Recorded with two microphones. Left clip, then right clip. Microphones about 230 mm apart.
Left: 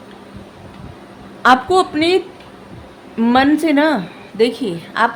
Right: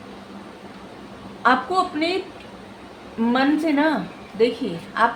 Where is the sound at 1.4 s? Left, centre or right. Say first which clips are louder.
Left 7 dB; left.